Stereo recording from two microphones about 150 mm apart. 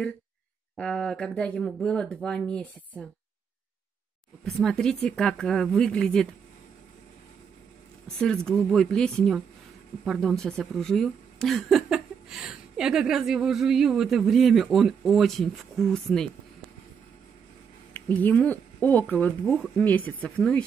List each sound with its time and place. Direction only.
0.7 s speech: 5° left (ahead or behind)
4.6 s speech: 5° left (ahead or behind)
8.2 s speech: 5° left (ahead or behind)
17.9 s speech: 10° left (ahead or behind)